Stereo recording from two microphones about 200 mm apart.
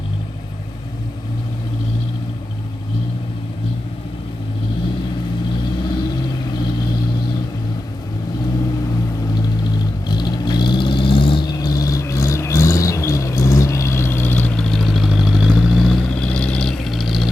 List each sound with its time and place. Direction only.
9.7 s vehicle: 20° left (ahead or behind); by 17.2 s centre (ahead or behind)